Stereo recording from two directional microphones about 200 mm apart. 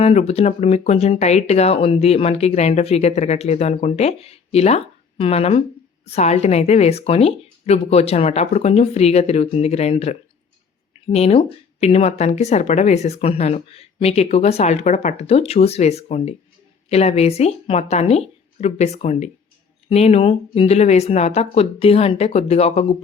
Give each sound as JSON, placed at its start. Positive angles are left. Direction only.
{"t": 0.0, "sound": "speech", "side_deg": 30}